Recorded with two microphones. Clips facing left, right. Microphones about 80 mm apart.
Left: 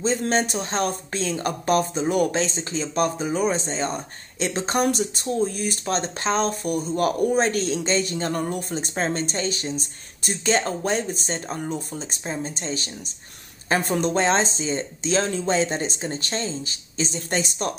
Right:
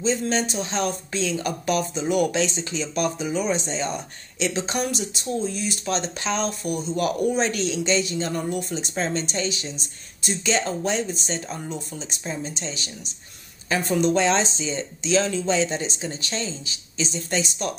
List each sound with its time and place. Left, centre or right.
0.0 s speech: left